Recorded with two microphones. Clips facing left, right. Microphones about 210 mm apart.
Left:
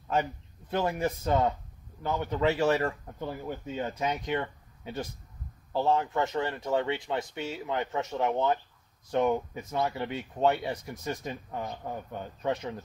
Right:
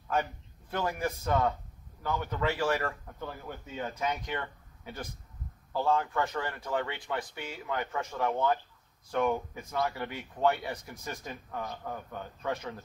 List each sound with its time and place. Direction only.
0.1 s a man's voice: 25° left (ahead or behind)